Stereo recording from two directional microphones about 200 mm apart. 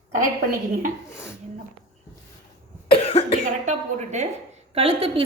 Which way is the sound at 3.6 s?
35° right (ahead or behind).